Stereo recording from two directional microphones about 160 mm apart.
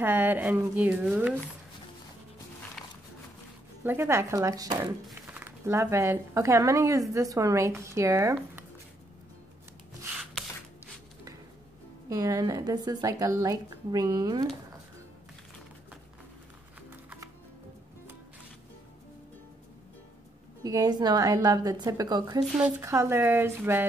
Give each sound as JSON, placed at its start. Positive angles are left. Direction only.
{"t": 0.0, "sound": "speech", "side_deg": -10}
{"t": 3.8, "sound": "speech", "side_deg": -15}
{"t": 5.2, "sound": "speech", "side_deg": -10}
{"t": 12.1, "sound": "speech", "side_deg": -20}
{"t": 16.9, "sound": "music", "side_deg": -10}
{"t": 20.6, "sound": "speech", "side_deg": -25}